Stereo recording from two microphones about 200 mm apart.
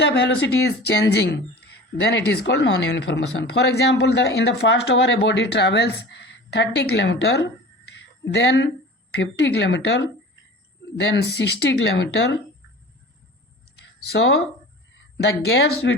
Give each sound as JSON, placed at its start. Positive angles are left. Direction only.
{"t": 0.0, "sound": "speech", "side_deg": 60}
{"t": 7.9, "sound": "a sound", "side_deg": 60}
{"t": 9.1, "sound": "speech", "side_deg": 60}
{"t": 14.1, "sound": "speech", "side_deg": 75}